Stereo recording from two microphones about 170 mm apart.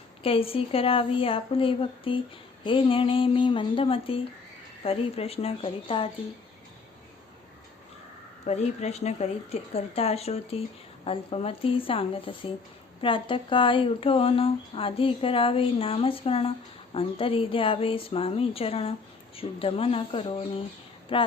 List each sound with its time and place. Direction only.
0.2 s speech: 35° left (ahead or behind)
8.4 s speech: 40° left (ahead or behind)